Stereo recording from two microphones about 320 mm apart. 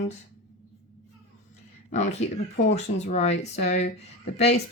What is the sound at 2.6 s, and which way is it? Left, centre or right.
Speech, centre.